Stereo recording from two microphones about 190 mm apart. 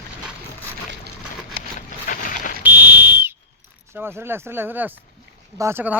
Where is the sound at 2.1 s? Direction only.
40° left (ahead or behind).